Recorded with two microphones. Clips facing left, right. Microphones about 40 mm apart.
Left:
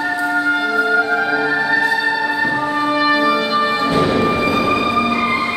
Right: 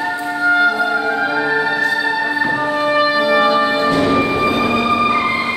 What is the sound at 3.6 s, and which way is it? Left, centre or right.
Music, centre.